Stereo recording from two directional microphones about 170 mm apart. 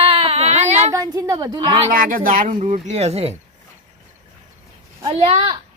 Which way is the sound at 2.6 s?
40° right (ahead or behind).